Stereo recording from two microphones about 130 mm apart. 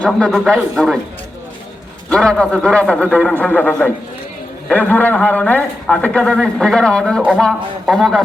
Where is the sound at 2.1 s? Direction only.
5° left (ahead or behind).